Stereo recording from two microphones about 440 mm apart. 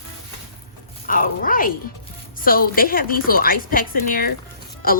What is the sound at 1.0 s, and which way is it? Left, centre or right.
A woman's voice, centre.